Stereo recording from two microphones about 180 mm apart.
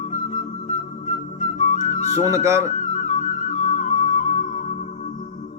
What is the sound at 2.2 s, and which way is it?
Speech, 15° right (ahead or behind).